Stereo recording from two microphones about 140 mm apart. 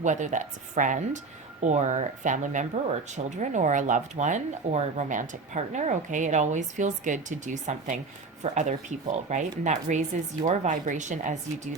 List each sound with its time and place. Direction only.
0.0 s speech: 60° right (ahead or behind)